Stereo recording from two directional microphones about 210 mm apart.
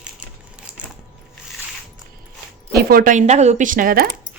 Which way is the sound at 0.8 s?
5° right (ahead or behind).